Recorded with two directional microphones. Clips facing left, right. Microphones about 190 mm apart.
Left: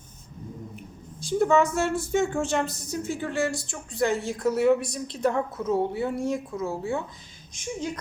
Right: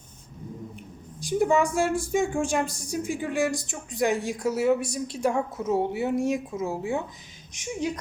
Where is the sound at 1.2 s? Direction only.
15° right (ahead or behind).